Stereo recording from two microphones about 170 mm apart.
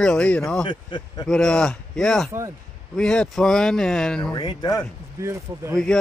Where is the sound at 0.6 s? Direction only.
25° left (ahead or behind).